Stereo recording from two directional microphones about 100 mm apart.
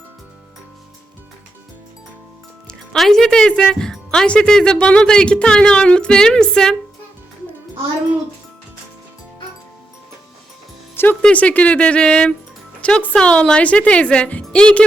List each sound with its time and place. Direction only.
2.6 s speech: 5° left (ahead or behind)
10.9 s music: 20° left (ahead or behind)
11.2 s speech: 15° left (ahead or behind)